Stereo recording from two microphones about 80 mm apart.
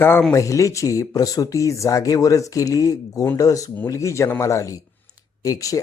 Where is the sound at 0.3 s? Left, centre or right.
Left.